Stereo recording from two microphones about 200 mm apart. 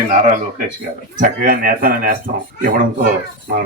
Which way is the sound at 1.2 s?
45° right (ahead or behind).